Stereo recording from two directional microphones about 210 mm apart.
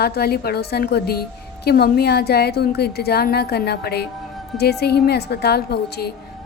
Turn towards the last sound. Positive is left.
turn(degrees=50)  # may be behind; listen again after turning